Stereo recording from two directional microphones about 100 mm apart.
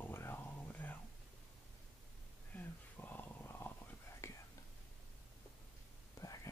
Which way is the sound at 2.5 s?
15° left (ahead or behind).